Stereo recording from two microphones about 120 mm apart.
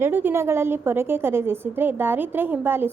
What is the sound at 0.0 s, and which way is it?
A woman's voice, 15° right (ahead or behind).